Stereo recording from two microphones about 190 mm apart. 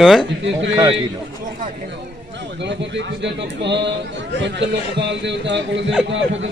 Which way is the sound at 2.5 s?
65° right (ahead or behind).